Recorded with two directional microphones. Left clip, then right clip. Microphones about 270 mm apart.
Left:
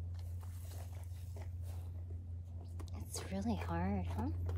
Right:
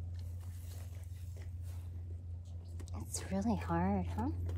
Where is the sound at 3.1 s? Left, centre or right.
Right.